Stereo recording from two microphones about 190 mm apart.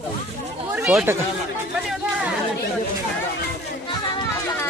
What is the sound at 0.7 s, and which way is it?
Speech, 5° right (ahead or behind).